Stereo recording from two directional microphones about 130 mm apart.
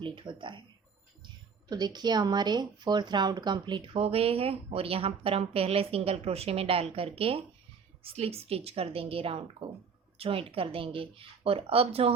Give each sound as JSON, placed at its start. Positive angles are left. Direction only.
{"t": 0.0, "sound": "speech", "side_deg": -40}
{"t": 1.7, "sound": "speech", "side_deg": -35}